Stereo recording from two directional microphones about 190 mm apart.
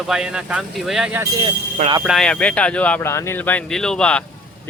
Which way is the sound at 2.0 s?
Centre (ahead or behind).